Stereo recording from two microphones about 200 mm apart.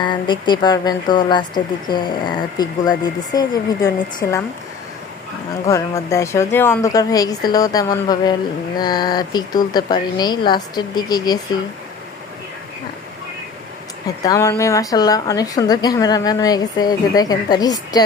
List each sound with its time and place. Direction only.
0.0 s a woman's voice: 20° left (ahead or behind)
5.6 s a woman's voice: 15° left (ahead or behind)
14.2 s a woman's voice: 15° left (ahead or behind)